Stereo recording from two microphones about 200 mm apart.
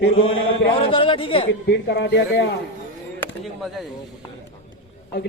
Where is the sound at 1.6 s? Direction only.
60° left (ahead or behind).